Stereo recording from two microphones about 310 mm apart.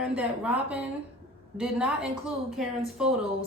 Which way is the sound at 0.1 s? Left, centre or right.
Centre.